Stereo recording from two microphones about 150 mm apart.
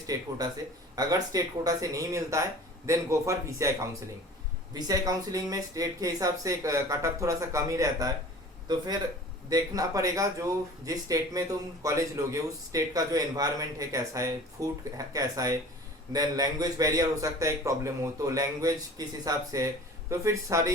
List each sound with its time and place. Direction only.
0.1 s speech: 25° right (ahead or behind)
4.7 s speech: 25° right (ahead or behind)